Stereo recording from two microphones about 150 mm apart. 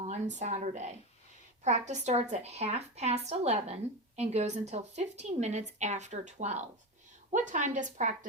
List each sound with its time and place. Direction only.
0.0 s a woman's voice: 50° right (ahead or behind)